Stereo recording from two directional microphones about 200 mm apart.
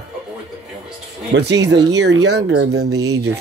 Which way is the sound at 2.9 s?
90° right.